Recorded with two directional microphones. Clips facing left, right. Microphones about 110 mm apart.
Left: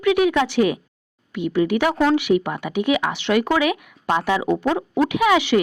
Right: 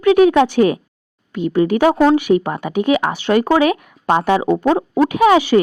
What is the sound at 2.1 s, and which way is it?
Speech, 45° right (ahead or behind).